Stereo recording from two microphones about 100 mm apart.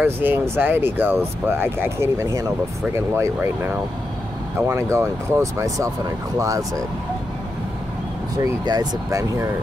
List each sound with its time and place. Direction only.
0.0 s speech: 20° right (ahead or behind)
3.3 s speech: 15° right (ahead or behind); by 6.8 s 35° right (ahead or behind)
8.4 s speech: 40° right (ahead or behind)